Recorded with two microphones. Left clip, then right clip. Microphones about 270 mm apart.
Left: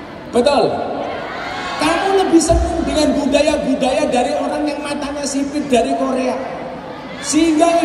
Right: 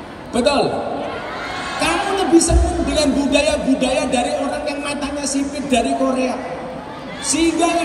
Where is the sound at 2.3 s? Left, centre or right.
Left.